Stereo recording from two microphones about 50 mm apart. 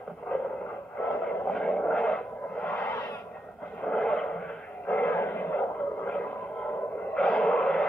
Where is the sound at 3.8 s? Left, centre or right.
Centre.